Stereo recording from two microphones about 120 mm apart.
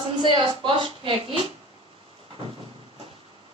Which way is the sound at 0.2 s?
45° right (ahead or behind).